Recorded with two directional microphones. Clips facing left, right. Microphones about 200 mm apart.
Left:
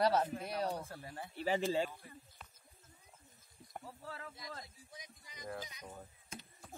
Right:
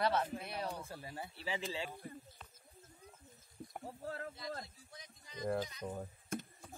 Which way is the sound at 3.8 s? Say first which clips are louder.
Right 4 dB; 45° right (ahead or behind).